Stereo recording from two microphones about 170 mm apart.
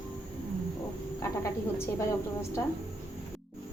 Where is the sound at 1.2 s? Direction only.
15° left (ahead or behind).